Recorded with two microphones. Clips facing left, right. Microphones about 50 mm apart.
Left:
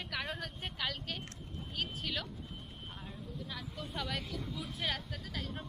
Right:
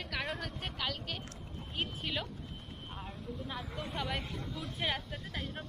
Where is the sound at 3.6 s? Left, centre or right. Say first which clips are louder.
Right 3 dB; right.